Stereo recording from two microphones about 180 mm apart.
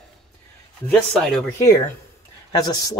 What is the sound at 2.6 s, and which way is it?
Speech, 20° left (ahead or behind).